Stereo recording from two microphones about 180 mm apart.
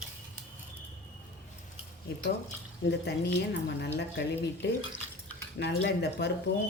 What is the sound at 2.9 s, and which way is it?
Speech, 70° left (ahead or behind).